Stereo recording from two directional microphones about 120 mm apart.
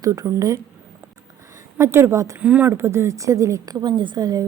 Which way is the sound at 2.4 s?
10° right (ahead or behind).